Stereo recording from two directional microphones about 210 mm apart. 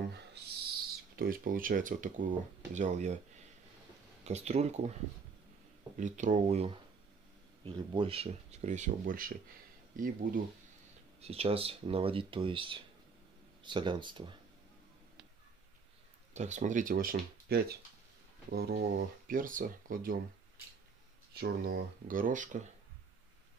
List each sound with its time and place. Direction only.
0.1 s a sound: 50° right (ahead or behind)
2.7 s speech: 35° right (ahead or behind)
4.2 s speech: 30° right (ahead or behind)
5.9 s speech: 35° right (ahead or behind)
11.1 s speech: 30° right (ahead or behind)
16.3 s speech: 35° right (ahead or behind)
21.3 s speech: 50° right (ahead or behind)